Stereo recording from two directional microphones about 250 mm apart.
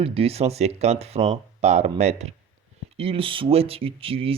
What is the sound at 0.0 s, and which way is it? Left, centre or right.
Speech, right.